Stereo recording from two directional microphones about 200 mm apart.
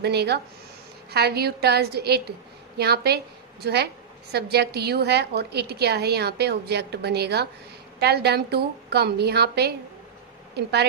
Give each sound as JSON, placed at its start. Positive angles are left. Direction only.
{"t": 0.0, "sound": "a woman's voice", "side_deg": -55}